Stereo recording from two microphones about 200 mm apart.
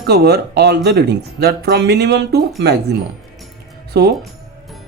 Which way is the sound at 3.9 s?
55° right (ahead or behind).